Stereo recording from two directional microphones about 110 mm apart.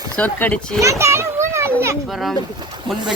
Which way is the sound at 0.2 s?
15° left (ahead or behind).